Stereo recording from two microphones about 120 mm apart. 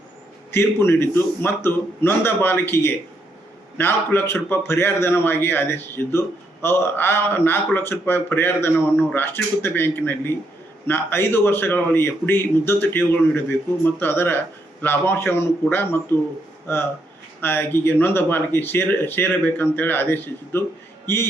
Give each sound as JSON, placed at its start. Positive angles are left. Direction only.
{"t": 0.5, "sound": "a man's voice", "side_deg": 20}